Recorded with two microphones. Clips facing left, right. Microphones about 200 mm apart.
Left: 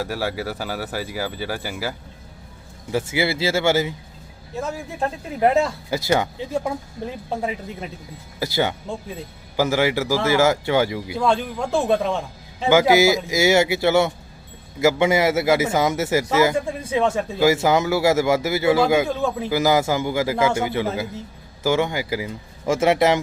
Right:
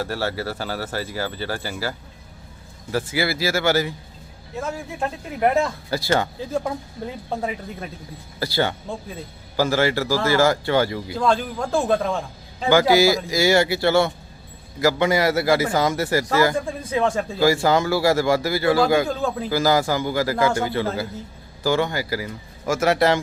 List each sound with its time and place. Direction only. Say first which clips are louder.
0.0 s a man's voice: even; 10° left (ahead or behind)
4.9 s a man's voice: left 3 dB; 25° left (ahead or behind)
8.4 s speech: left 1 dB; 15° left (ahead or behind)
12.6 s a man's voice: left 1 dB; 20° left (ahead or behind)
17.4 s a man's voice: left 1 dB; 20° left (ahead or behind)
19.0 s a man's voice: left 1 dB; 5° left (ahead or behind)
19.5 s a man's voice: left 1 dB; 20° left (ahead or behind)